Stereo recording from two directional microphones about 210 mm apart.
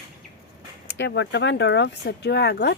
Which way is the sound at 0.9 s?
55° left (ahead or behind).